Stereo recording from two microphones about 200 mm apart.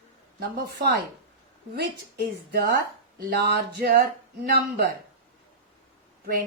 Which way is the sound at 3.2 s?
50° right (ahead or behind).